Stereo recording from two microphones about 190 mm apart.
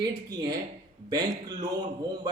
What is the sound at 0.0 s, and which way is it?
Speech, 20° right (ahead or behind).